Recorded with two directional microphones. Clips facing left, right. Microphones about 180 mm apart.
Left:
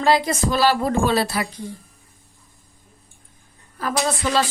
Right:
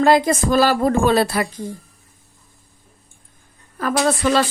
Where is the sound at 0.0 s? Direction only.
50° right (ahead or behind).